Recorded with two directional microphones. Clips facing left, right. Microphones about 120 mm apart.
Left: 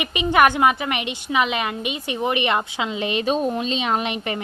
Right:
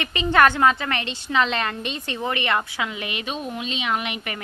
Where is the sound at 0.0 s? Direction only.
15° left (ahead or behind).